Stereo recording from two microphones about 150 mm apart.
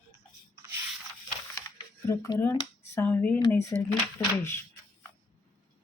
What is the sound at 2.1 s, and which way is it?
Speech, 20° left (ahead or behind).